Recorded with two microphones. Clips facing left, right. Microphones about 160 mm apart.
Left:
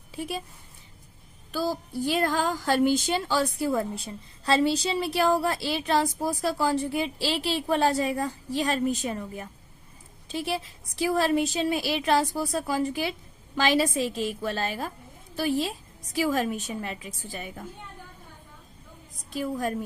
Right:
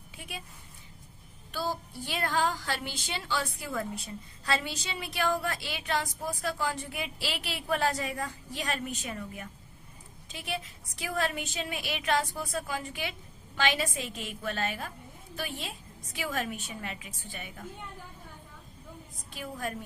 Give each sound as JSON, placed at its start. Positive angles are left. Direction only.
{"t": 0.2, "sound": "a woman's voice", "side_deg": 35}
{"t": 1.5, "sound": "a woman's voice", "side_deg": 40}
{"t": 19.3, "sound": "a woman's voice", "side_deg": 35}